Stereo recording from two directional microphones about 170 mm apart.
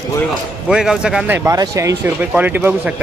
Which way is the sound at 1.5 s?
20° right (ahead or behind).